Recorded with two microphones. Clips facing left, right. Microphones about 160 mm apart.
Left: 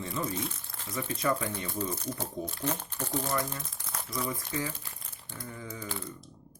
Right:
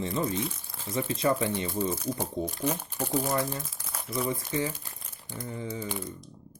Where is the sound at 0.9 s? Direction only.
25° right (ahead or behind).